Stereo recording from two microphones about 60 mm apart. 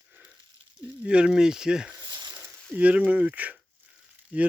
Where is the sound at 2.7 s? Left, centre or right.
Right.